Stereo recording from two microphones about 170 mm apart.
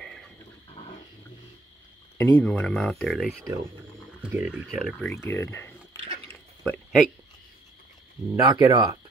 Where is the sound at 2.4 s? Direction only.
5° left (ahead or behind).